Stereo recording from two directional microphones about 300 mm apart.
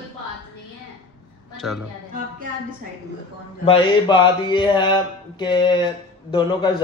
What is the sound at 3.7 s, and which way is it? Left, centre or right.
Mantra, centre.